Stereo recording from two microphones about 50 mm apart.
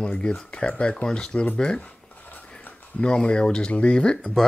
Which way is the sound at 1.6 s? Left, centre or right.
Left.